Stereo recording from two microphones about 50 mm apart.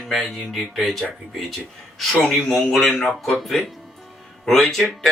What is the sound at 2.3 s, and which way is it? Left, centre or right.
A man's voice, centre.